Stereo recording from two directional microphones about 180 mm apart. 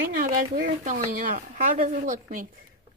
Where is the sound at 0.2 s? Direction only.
50° right (ahead or behind).